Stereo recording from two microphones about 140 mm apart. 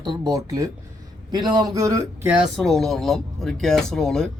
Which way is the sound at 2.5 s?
Centre (ahead or behind).